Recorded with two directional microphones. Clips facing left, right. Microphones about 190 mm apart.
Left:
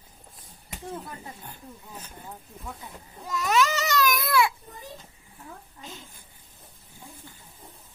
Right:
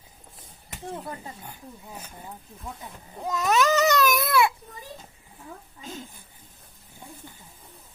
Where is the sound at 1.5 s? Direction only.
10° right (ahead or behind).